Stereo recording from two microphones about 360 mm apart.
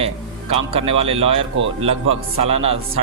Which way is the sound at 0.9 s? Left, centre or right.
Centre.